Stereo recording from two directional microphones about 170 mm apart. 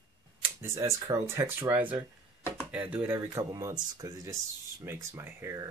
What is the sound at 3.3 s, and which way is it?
Speech, 20° right (ahead or behind).